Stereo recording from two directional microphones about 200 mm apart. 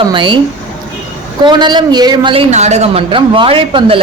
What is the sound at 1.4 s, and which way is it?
A man's voice, 20° right (ahead or behind).